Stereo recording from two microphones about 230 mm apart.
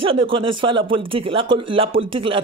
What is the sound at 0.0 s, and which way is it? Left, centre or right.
Speech, right.